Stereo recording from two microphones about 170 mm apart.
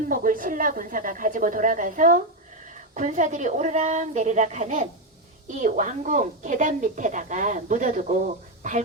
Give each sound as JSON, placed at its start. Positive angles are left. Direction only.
{"t": 0.1, "sound": "a woman's voice", "side_deg": -55}